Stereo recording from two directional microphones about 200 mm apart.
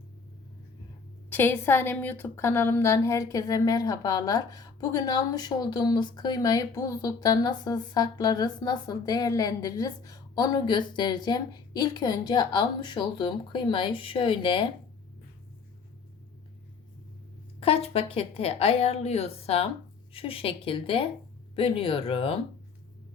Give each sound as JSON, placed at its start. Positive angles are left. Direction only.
{"t": 1.3, "sound": "a woman's voice", "side_deg": 10}
{"t": 17.6, "sound": "a woman's voice", "side_deg": 30}